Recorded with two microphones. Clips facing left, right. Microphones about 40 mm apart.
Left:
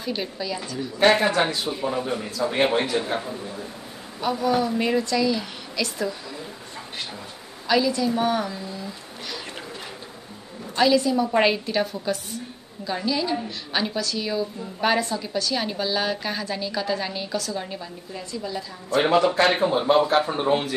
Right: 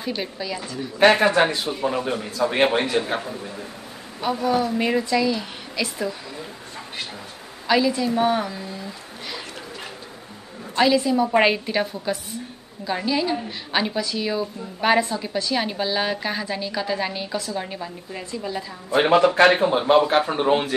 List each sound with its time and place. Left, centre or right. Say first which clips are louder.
0.1 s a woman's voice: even; centre
1.2 s a man's voice: right 3 dB; right
1.7 s a woman's voice: right 2 dB; right
4.2 s a woman's voice: right 1 dB; centre
7.6 s a woman's voice: right 1 dB; centre
10.8 s a woman's voice: right 1 dB; centre
19.0 s a man's voice: right 4 dB; right
19.9 s a woman's voice: right 2 dB; right